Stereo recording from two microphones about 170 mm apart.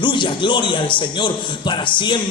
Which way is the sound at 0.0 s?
30° left (ahead or behind).